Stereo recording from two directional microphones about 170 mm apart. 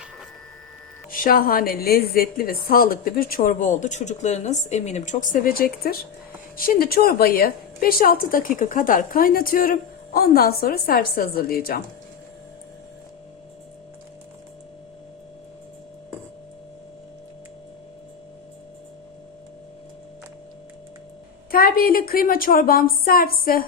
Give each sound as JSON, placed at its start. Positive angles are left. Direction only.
{"t": 1.1, "sound": "a woman's voice", "side_deg": 55}
{"t": 21.5, "sound": "a woman's voice", "side_deg": 60}